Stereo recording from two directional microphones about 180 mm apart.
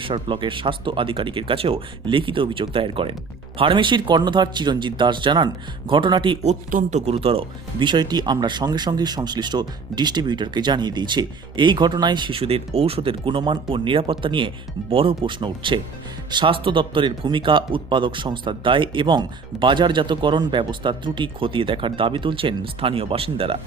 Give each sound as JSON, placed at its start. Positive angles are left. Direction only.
{"t": 0.0, "sound": "speech", "side_deg": -30}